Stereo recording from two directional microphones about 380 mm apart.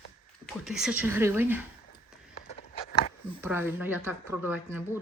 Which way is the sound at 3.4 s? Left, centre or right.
Centre.